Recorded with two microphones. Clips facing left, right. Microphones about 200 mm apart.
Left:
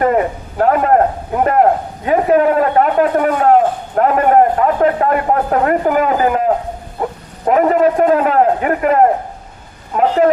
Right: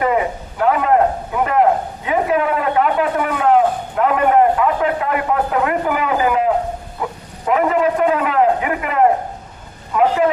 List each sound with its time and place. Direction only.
0.6 s a sound: 45° left (ahead or behind)
2.0 s a man's voice: 45° left (ahead or behind)
7.0 s bow-wow: 40° left (ahead or behind)
7.4 s a man's voice: 40° left (ahead or behind)